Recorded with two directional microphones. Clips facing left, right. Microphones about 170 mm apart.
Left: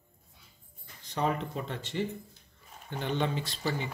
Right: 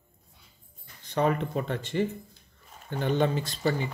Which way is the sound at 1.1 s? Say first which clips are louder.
Right 5 dB; 60° right (ahead or behind).